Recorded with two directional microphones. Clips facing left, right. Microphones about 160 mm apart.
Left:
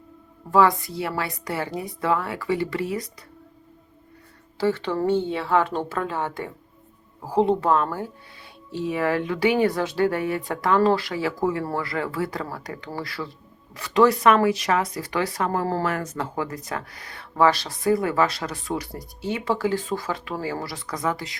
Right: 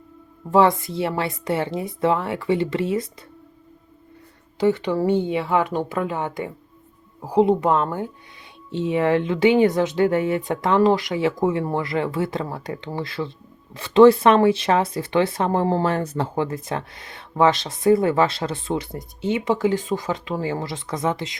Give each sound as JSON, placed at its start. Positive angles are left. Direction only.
{"t": 0.5, "sound": "speech", "side_deg": -25}
{"t": 4.5, "sound": "speech", "side_deg": -15}